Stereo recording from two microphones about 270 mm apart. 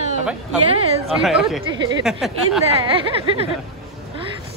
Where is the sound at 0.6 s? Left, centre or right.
Right.